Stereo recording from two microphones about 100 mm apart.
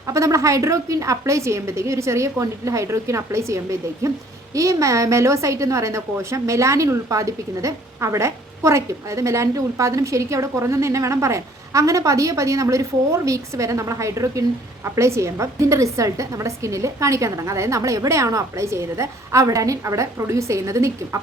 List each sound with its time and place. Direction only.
0.1 s a woman's voice: 30° right (ahead or behind)